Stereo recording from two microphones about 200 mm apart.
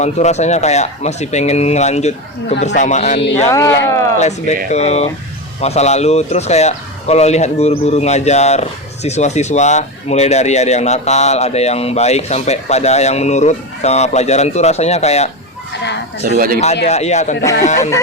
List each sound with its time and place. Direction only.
0.0 s speech: 35° left (ahead or behind)
3.5 s speech: 15° left (ahead or behind)
4.2 s speech: 35° left (ahead or behind)
16.2 s speech: 45° right (ahead or behind)
16.9 s speech: 35° left (ahead or behind)